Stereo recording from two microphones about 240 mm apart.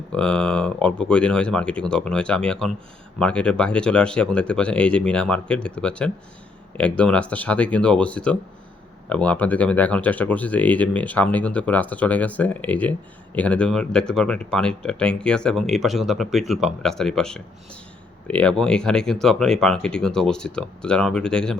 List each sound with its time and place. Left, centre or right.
0.1 s speech: centre